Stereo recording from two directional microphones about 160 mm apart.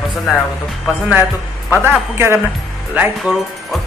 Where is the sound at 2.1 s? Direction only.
15° right (ahead or behind).